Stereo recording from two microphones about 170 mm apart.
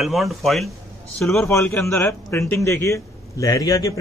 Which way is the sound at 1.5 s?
15° left (ahead or behind).